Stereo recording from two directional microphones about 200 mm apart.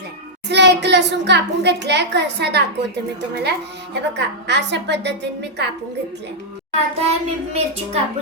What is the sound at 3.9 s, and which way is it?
A child's voice, 60° right (ahead or behind).